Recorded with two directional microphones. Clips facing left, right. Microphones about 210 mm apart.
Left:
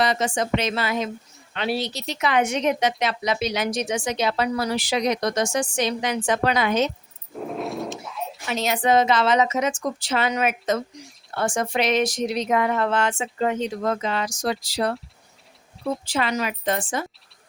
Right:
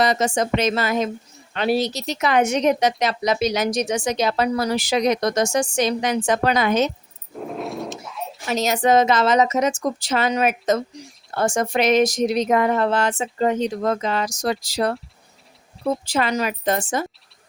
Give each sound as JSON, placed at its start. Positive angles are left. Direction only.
{"t": 0.0, "sound": "speech", "side_deg": -40}
{"t": 7.3, "sound": "dog", "side_deg": 0}
{"t": 8.4, "sound": "speech", "side_deg": -40}